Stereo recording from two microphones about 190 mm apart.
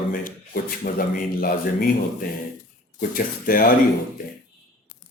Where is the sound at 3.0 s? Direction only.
50° left (ahead or behind).